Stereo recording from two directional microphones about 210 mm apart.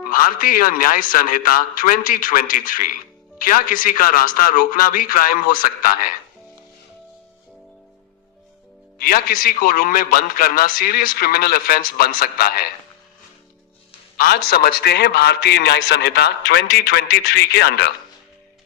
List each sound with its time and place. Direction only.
0.1 s speech: 40° left (ahead or behind)
9.0 s a man's voice: 45° left (ahead or behind)
14.2 s a man's voice: 50° left (ahead or behind)